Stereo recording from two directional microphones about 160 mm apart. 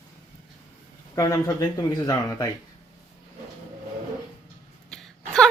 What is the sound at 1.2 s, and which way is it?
Speech, 25° left (ahead or behind).